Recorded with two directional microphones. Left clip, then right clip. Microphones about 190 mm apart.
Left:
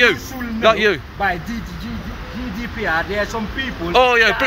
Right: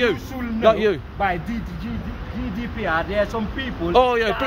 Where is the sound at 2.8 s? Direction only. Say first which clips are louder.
Left 2 dB; 20° right (ahead or behind).